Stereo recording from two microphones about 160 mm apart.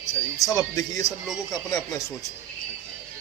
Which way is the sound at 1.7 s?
20° left (ahead or behind).